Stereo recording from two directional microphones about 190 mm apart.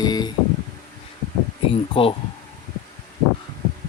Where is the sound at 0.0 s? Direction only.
20° left (ahead or behind).